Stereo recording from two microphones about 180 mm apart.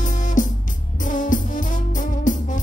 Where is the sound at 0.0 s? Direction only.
45° left (ahead or behind).